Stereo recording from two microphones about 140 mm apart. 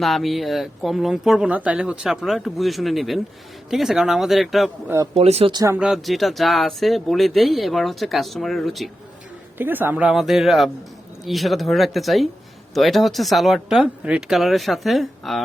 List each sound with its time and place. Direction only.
0.0 s speech: centre (ahead or behind)
5.1 s speech: 45° right (ahead or behind)
5.5 s speech: 30° right (ahead or behind)
5.7 s speech: 5° right (ahead or behind)
9.6 s speech: 15° right (ahead or behind); by 15.4 s centre (ahead or behind)